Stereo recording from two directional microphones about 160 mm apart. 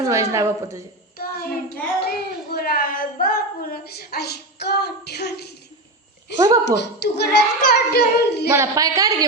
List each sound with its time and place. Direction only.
0.0 s a woman's voice: 20° right (ahead or behind)
1.2 s a sound: 70° left (ahead or behind); by 5.5 s 90° left
6.7 s a child's voice: 90° left
8.4 s a woman's voice: 20° right (ahead or behind)